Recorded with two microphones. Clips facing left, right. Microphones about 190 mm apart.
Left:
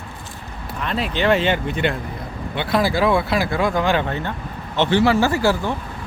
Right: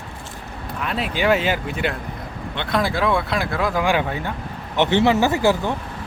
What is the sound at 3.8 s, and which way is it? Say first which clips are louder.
Speech: left 1 dB; 10° right (ahead or behind).